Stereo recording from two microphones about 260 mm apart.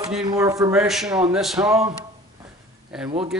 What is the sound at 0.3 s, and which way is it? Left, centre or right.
Speech, centre.